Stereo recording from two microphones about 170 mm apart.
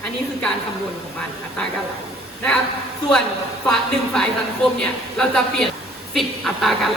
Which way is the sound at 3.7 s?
5° left (ahead or behind).